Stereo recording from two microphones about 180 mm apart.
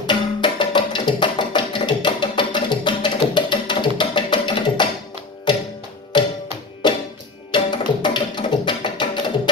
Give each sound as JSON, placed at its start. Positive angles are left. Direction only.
{"t": 0.0, "sound": "music", "side_deg": 25}
{"t": 6.1, "sound": "music", "side_deg": 25}